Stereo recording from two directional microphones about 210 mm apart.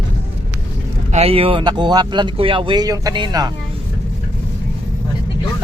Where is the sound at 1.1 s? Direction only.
30° right (ahead or behind).